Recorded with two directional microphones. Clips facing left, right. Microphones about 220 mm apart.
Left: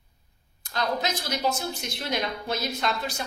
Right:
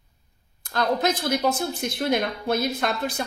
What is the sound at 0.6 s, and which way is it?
A woman's voice, 55° right (ahead or behind).